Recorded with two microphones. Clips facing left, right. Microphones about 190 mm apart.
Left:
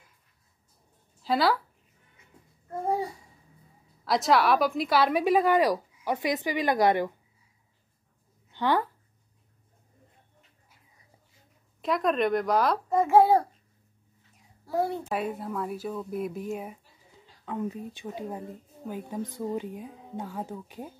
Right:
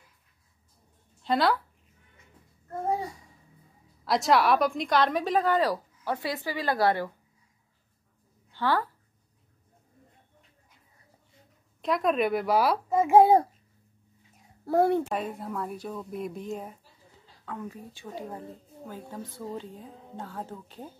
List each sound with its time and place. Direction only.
1.2 s speech: centre (ahead or behind)
4.0 s a woman's voice: centre (ahead or behind); by 7.1 s 20° left (ahead or behind)
8.5 s a sound: 20° left (ahead or behind)
11.8 s speech: centre (ahead or behind)
13.0 s a child's voice: 20° right (ahead or behind)
14.7 s a child's voice: 60° right (ahead or behind)
15.0 s speech: 5° left (ahead or behind)
17.5 s a woman's voice: 20° left (ahead or behind)